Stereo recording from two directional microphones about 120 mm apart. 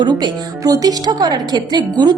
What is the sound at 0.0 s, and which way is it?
A woman's voice, 40° right (ahead or behind).